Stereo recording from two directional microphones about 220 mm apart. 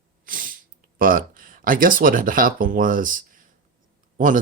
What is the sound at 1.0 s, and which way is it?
Speech, 40° right (ahead or behind).